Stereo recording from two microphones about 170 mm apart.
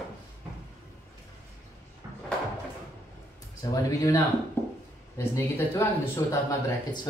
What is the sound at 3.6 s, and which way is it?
Speech, 20° left (ahead or behind).